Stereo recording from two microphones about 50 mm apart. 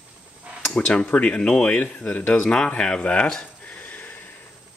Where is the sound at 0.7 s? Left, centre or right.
Left.